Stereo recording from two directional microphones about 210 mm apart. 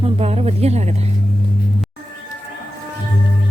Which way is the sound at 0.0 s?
30° right (ahead or behind).